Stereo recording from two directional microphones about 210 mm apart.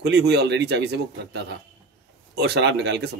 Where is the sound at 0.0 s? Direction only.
55° right (ahead or behind).